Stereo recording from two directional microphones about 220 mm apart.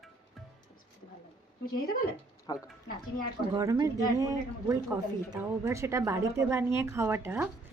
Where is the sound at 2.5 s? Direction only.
20° left (ahead or behind).